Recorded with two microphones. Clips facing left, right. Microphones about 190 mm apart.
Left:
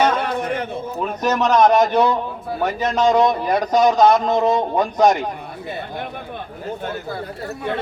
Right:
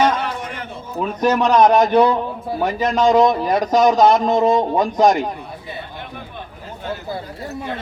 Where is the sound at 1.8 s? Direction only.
5° left (ahead or behind).